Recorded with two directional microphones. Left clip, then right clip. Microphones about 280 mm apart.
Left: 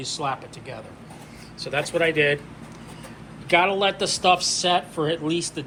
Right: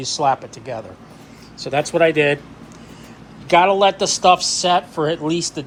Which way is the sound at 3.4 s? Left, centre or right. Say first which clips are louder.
Right 6 dB; centre.